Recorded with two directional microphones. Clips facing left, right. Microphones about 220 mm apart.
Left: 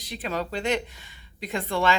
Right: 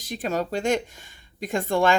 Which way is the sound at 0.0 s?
45° right (ahead or behind).